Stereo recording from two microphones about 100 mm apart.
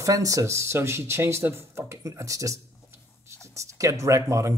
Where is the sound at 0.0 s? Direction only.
35° right (ahead or behind).